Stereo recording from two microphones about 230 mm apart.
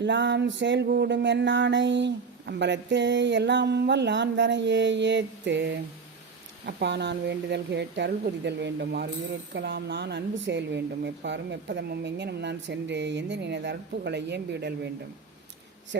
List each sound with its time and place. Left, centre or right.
0.0 s music: right